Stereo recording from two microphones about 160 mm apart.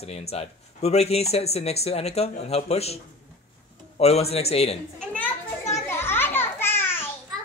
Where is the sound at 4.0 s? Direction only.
40° left (ahead or behind).